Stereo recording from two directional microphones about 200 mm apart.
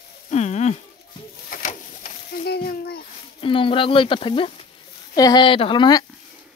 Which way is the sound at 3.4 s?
25° left (ahead or behind).